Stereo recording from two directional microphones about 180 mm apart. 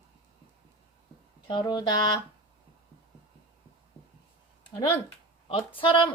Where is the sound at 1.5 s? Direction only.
25° left (ahead or behind).